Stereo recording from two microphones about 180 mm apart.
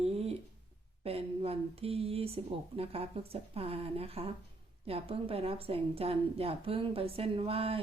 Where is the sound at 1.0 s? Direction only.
35° right (ahead or behind).